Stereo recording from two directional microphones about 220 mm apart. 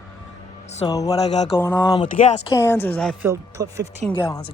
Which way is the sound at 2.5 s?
10° left (ahead or behind).